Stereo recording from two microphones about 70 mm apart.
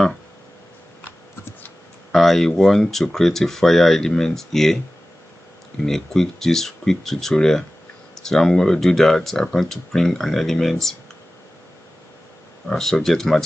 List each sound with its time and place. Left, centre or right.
2.1 s speech: centre
5.9 s speech: centre
12.6 s speech: centre